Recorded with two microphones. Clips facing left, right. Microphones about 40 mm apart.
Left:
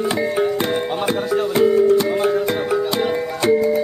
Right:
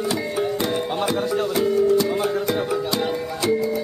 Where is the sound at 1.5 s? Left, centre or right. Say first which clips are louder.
Left 5 dB; left.